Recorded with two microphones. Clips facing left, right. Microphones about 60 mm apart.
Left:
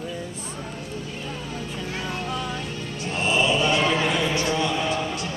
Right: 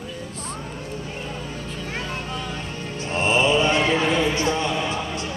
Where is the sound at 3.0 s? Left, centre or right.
Right.